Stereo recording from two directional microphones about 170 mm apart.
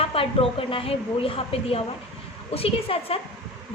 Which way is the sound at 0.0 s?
35° left (ahead or behind).